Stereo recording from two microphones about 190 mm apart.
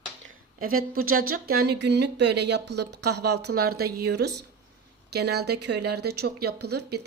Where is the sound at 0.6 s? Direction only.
50° right (ahead or behind).